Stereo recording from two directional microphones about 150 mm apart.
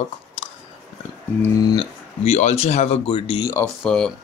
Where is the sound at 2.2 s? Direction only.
45° left (ahead or behind).